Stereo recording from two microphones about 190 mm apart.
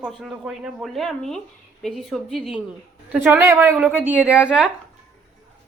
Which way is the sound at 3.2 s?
15° right (ahead or behind).